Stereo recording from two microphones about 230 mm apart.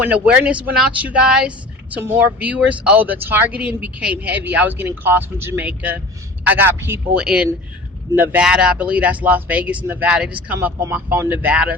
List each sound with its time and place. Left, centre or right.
0.0 s a woman's voice: centre